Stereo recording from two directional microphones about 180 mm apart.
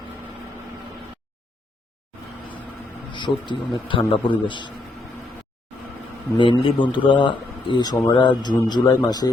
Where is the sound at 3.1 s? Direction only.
25° left (ahead or behind).